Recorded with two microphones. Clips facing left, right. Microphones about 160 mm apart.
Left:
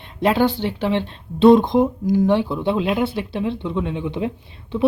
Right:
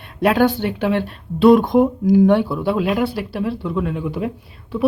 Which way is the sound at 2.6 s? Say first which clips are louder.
Right 1 dB; 5° right (ahead or behind).